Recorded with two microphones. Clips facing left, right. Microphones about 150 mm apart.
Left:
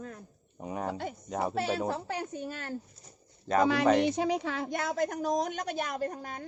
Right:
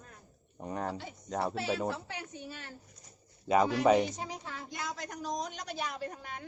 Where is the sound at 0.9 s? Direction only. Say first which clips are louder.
Left 6 dB; 55° left (ahead or behind).